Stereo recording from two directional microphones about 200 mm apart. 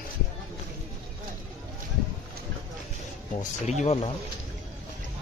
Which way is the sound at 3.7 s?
30° left (ahead or behind).